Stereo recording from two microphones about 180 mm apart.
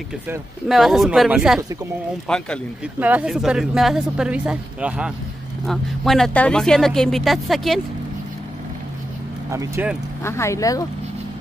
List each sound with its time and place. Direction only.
0.7 s speech: centre (ahead or behind)
3.0 s speech: 10° right (ahead or behind)
9.5 s speech: 15° right (ahead or behind)
10.2 s speech: 15° left (ahead or behind)